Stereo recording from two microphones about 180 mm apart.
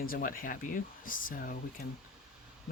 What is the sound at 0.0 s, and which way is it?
Speech, 55° left (ahead or behind).